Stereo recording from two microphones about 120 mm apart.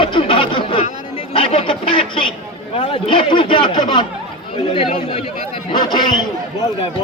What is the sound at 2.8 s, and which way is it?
Speech, 50° left (ahead or behind).